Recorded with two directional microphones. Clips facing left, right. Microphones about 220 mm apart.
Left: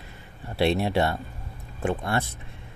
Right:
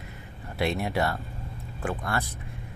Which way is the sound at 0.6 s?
30° left (ahead or behind).